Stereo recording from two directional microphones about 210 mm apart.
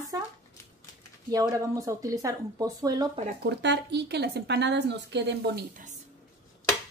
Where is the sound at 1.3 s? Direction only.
15° right (ahead or behind).